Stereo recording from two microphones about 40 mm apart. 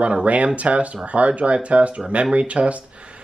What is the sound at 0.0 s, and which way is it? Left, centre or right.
Speech, right.